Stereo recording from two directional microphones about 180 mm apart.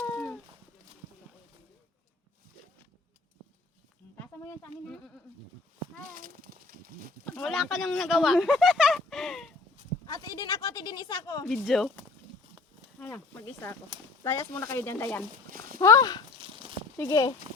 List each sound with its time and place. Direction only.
4.2 s a sound: 15° left (ahead or behind)
6.1 s speech: 50° right (ahead or behind)
7.3 s speech: centre (ahead or behind)
10.1 s speech: 20° left (ahead or behind)
11.4 s speech: centre (ahead or behind)
13.0 s speech: 10° left (ahead or behind)
15.4 s a sound: 50° right (ahead or behind)
15.8 s speech: 20° left (ahead or behind)
16.4 s a sound: 30° right (ahead or behind)
17.0 s speech: 15° left (ahead or behind)